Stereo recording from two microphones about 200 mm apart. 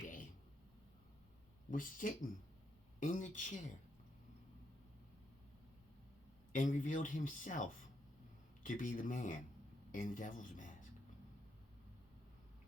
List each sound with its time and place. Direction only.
0.0 s a sound: 40° left (ahead or behind)
1.7 s speech: 40° left (ahead or behind)
6.5 s speech: 40° left (ahead or behind)